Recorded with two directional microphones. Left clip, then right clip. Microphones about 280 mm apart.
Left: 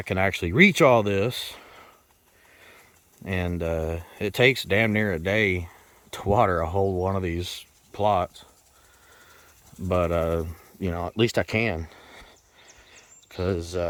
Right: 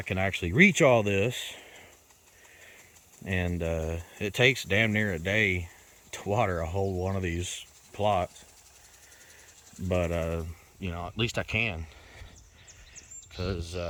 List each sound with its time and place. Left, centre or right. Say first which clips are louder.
0.0 s speech: left 5 dB; centre
3.2 s speech: left 3 dB; centre
9.9 s speech: left 6 dB; centre
12.9 s a sound: right 1 dB; centre